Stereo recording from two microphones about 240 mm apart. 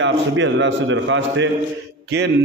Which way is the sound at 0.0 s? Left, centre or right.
Right.